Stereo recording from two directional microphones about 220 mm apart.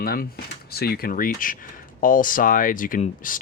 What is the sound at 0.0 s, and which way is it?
Speech, 40° left (ahead or behind).